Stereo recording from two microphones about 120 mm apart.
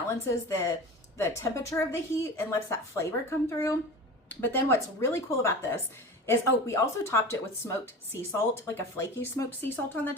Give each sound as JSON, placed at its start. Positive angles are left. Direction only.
{"t": 0.1, "sound": "a woman's voice", "side_deg": 25}